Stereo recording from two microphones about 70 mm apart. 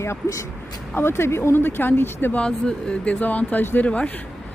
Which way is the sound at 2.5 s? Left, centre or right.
Centre.